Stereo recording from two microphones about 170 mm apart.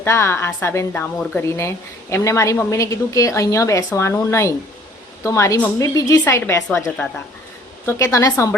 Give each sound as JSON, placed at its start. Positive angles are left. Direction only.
{"t": 0.0, "sound": "a woman's voice", "side_deg": 15}